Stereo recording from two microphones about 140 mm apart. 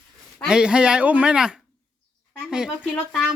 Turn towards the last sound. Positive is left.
turn(degrees=-5)  # may be behind; listen again after turning